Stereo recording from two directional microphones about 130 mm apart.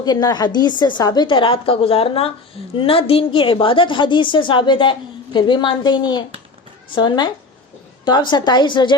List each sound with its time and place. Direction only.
0.0 s a woman's voice: 30° left (ahead or behind)